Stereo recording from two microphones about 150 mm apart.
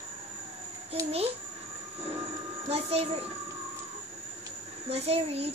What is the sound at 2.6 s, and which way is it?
Speech, 45° right (ahead or behind).